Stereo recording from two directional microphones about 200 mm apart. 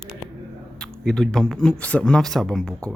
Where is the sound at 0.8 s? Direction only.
Centre (ahead or behind).